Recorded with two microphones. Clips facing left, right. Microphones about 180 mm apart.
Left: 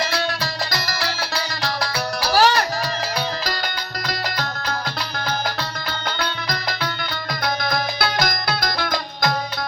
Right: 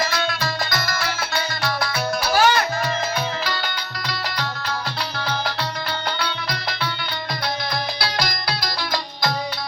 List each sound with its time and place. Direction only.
0.0 s music: 35° left (ahead or behind)
7.6 s music: 50° left (ahead or behind)